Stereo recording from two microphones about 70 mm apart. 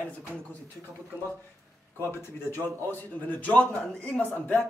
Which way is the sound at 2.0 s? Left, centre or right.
Left.